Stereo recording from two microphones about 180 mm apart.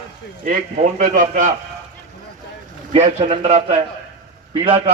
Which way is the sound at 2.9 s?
35° right (ahead or behind).